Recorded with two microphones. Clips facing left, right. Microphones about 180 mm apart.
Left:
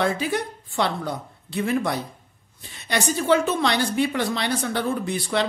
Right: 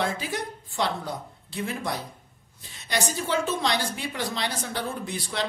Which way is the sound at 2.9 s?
60° left (ahead or behind).